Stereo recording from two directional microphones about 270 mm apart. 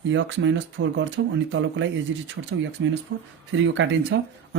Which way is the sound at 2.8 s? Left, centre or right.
Right.